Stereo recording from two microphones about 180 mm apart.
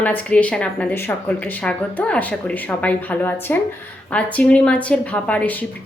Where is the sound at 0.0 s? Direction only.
10° left (ahead or behind).